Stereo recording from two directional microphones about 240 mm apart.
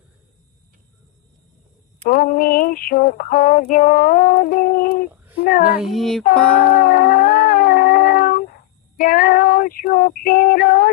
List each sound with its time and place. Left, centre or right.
2.0 s female singing: left
5.4 s a child's voice: left
5.6 s speech: centre
6.8 s dog: left
9.0 s female singing: left